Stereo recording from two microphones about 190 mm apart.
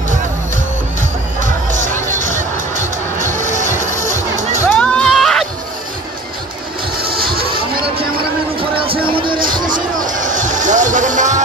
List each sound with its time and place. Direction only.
1.4 s music: 40° right (ahead or behind)
3.6 s music: 45° left (ahead or behind)
4.4 s music: 35° right (ahead or behind)
4.6 s a sound: 5° left (ahead or behind)
7.2 s a sound: 50° right (ahead or behind)
8.5 s music: 30° right (ahead or behind)
9.4 s music: 45° right (ahead or behind)